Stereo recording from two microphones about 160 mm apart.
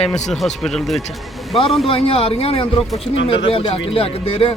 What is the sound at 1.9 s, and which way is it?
Speech, 35° left (ahead or behind).